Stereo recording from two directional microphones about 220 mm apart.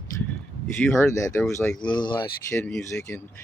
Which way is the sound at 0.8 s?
10° left (ahead or behind).